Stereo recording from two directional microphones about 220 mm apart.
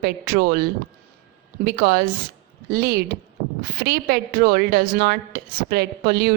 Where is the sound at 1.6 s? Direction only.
45° right (ahead or behind).